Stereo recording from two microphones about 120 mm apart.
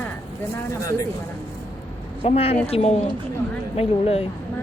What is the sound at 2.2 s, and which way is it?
Speech, 55° left (ahead or behind).